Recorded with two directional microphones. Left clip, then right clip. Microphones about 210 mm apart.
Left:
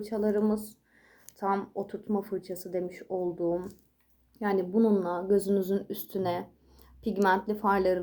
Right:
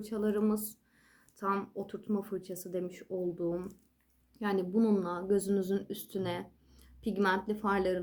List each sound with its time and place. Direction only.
0.1 s speech: 15° right (ahead or behind)